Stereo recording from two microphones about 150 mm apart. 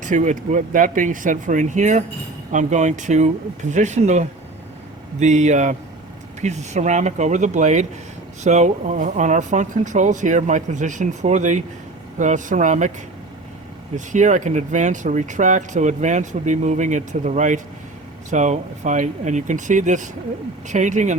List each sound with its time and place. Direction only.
0.0 s speech: 55° right (ahead or behind)
13.9 s speech: 55° right (ahead or behind)